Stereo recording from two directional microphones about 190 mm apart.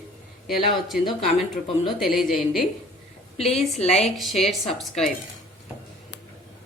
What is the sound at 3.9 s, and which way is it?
Speech, 35° left (ahead or behind).